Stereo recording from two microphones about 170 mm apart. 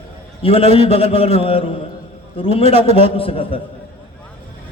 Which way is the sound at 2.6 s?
40° right (ahead or behind).